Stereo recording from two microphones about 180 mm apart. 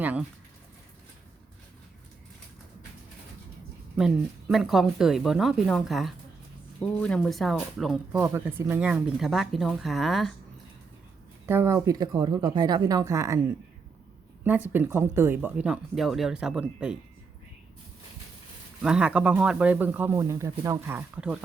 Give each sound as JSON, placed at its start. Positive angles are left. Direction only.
{"t": 0.0, "sound": "a sound", "side_deg": -10}
{"t": 3.9, "sound": "speech", "side_deg": 0}
{"t": 8.1, "sound": "speech", "side_deg": -15}
{"t": 11.4, "sound": "speech", "side_deg": -15}
{"t": 14.4, "sound": "speech", "side_deg": -10}
{"t": 18.8, "sound": "speech", "side_deg": -5}